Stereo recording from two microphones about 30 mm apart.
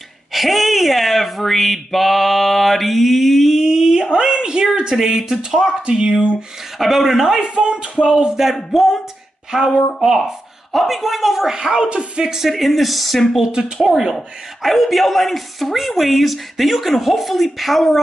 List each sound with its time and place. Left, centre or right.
0.3 s speech: centre
3.5 s a sound: right
5.0 s speech: centre
5.9 s speech: right
6.8 s speech: centre
7.4 s speech: right
8.7 s speech: centre
11.5 s speech: right
12.4 s speech: centre
13.8 s speech: centre
14.1 s speech: centre